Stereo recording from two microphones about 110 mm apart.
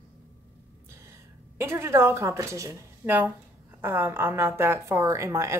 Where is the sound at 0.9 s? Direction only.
25° right (ahead or behind).